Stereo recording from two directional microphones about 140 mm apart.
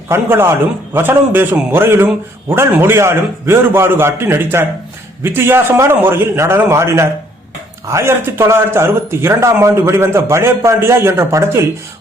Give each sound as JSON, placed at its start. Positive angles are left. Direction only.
{"t": 0.1, "sound": "a man's voice", "side_deg": -15}